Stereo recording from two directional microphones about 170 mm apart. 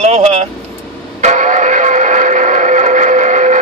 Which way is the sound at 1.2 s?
45° right (ahead or behind).